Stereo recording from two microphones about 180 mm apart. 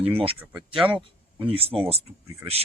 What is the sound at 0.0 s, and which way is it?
Speech, 30° right (ahead or behind).